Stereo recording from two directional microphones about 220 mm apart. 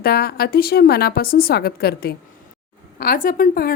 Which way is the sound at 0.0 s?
45° left (ahead or behind).